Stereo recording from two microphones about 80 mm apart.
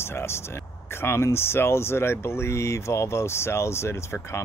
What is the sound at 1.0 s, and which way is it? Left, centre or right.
Speech, left.